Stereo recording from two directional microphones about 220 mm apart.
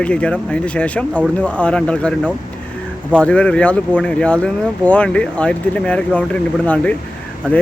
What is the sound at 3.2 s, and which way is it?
Speech, 5° left (ahead or behind).